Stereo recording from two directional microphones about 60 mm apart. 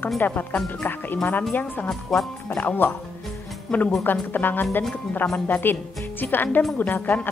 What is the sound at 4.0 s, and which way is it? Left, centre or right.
Speech, left.